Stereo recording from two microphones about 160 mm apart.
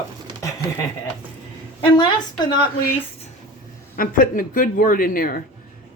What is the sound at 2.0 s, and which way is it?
Speech, 25° left (ahead or behind).